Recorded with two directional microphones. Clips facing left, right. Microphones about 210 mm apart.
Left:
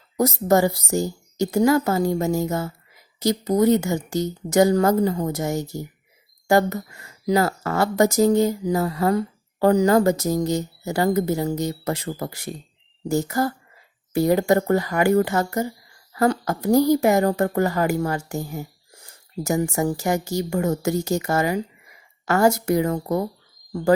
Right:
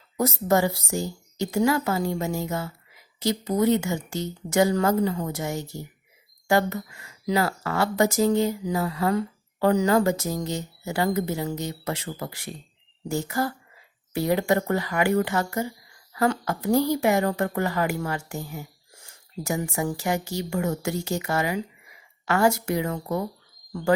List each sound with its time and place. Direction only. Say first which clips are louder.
0.2 s speech: left 4 dB; 40° left (ahead or behind)